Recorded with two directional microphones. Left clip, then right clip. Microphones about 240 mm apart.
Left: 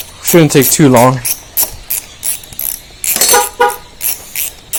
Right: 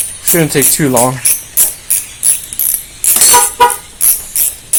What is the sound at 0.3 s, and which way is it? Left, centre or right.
Speech, left.